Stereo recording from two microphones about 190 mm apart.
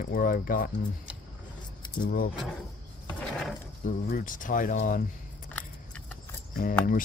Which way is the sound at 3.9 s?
50° left (ahead or behind).